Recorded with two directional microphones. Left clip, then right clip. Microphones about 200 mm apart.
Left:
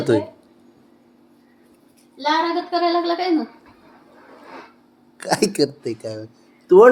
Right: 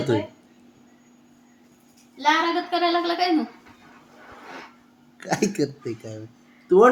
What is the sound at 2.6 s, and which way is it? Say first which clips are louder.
Speech: left 3 dB; 20° right (ahead or behind).